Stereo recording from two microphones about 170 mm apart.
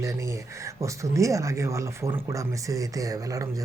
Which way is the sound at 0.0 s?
20° right (ahead or behind).